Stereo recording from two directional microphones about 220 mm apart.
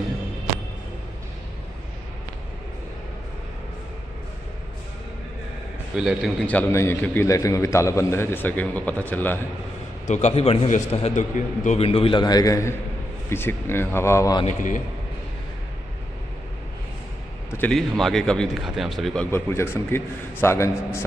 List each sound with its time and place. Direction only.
5.9 s a man's voice: centre (ahead or behind)
10.0 s a man's voice: 30° left (ahead or behind); by 14.4 s 15° left (ahead or behind)
14.4 s a man's voice: 35° left (ahead or behind)
17.5 s speech: 5° left (ahead or behind)
19.3 s a man's voice: 10° left (ahead or behind)